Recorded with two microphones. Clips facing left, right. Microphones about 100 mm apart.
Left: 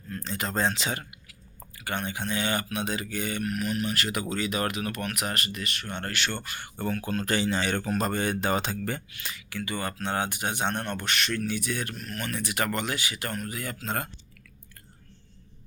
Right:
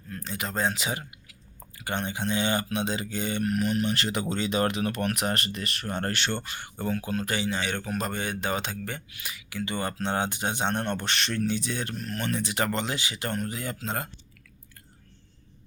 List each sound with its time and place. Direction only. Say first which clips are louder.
0.1 s speech: left 2 dB; 5° right (ahead or behind)
1.8 s speech: right 2 dB; 20° right (ahead or behind)
3.4 s speech: right 5 dB; 35° right (ahead or behind); by 7.3 s 15° right (ahead or behind)
7.3 s speech: left 5 dB; centre (ahead or behind)
9.0 s speech: left 1 dB; 10° right (ahead or behind)
9.6 s speech: right 2 dB; 25° right (ahead or behind)
13.8 s speech: left 2 dB; 10° right (ahead or behind)